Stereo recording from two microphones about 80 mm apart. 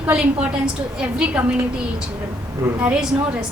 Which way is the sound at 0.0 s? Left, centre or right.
Centre.